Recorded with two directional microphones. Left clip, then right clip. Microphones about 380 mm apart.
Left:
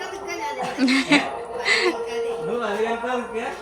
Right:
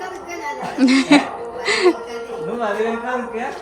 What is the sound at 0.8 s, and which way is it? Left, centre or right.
Speech, centre.